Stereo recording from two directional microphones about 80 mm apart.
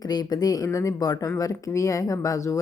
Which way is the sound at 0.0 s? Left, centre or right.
Left.